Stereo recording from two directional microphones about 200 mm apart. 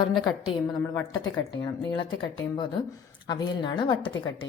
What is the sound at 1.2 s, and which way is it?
Speech, 20° left (ahead or behind).